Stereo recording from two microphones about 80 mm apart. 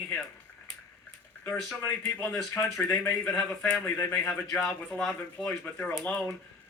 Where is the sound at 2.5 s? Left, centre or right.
Left.